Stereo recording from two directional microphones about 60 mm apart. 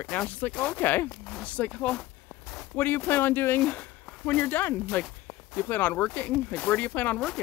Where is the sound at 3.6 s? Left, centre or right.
Left.